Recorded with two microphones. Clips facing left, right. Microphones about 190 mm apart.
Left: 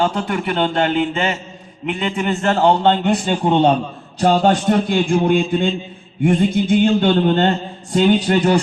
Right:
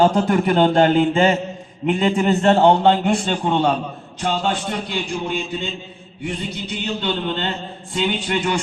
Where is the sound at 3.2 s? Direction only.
10° left (ahead or behind).